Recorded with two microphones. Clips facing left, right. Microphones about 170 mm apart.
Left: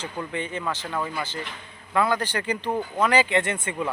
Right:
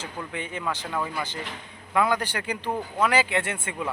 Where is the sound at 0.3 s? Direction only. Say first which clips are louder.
Left 1 dB; 10° right (ahead or behind).